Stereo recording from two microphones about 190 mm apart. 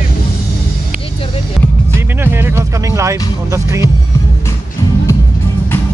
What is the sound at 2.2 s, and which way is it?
Music, 10° right (ahead or behind).